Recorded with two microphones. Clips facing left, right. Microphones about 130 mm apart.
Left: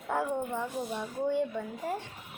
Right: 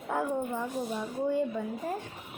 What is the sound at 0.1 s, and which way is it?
A woman's voice, centre (ahead or behind).